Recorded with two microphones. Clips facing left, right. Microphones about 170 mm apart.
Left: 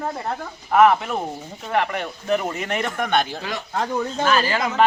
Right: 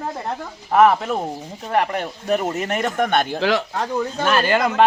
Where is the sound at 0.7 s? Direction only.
35° right (ahead or behind).